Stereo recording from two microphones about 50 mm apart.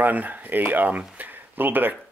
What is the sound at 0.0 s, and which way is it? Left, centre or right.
Speech, right.